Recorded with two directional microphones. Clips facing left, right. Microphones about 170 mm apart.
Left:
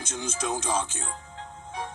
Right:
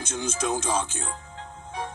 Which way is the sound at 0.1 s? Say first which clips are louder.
Right 3 dB; 70° right (ahead or behind).